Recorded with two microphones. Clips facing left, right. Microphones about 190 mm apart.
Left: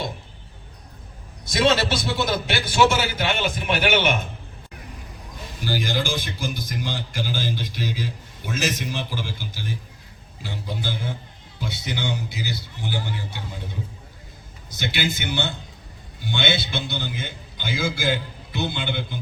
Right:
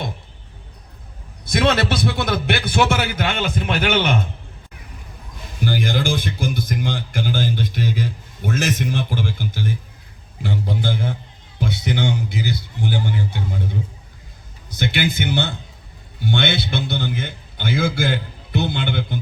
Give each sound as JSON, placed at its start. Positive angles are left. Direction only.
{"t": 1.5, "sound": "speech", "side_deg": -55}
{"t": 5.6, "sound": "speech", "side_deg": -55}
{"t": 14.8, "sound": "speech", "side_deg": -55}